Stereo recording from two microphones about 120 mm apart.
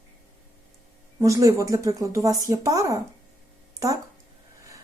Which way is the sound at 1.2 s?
25° right (ahead or behind).